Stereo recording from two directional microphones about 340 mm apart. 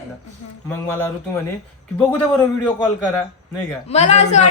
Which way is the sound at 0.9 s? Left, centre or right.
Centre.